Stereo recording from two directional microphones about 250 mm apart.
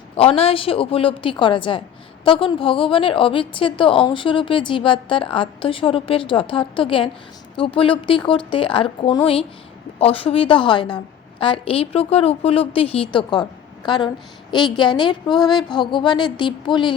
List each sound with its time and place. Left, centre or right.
0.2 s a woman's voice: left
15.4 s a sound: centre
15.7 s a woman's voice: centre